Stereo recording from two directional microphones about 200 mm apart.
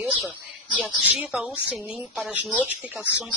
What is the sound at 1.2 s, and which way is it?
Speech, 5° right (ahead or behind).